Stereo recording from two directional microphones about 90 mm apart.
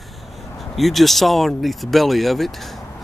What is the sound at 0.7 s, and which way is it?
Speech, centre (ahead or behind).